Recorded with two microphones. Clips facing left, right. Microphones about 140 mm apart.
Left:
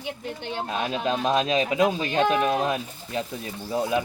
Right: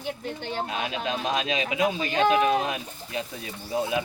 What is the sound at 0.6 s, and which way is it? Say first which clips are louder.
Speech: left 7 dB; 35° left (ahead or behind).